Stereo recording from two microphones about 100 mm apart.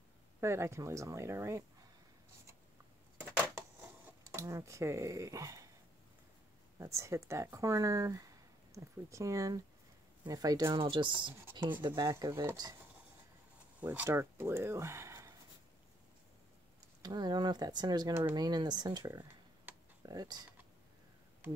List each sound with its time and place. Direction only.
0.4 s speech: 30° right (ahead or behind)
3.2 s a sound: 25° right (ahead or behind)
6.8 s speech: 30° right (ahead or behind)
10.8 s speech: 55° right (ahead or behind)
12.1 s speech: 35° right (ahead or behind)
13.7 s speech: 20° right (ahead or behind)
17.0 s speech: 45° right (ahead or behind)